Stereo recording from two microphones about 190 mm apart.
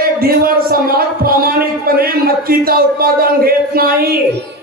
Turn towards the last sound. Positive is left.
turn(degrees=-50)  # may be behind; listen again after turning